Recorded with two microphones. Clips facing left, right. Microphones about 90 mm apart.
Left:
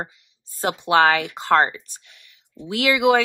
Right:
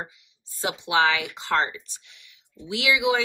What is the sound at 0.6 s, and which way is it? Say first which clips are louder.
Speech: left 5 dB; 50° left (ahead or behind).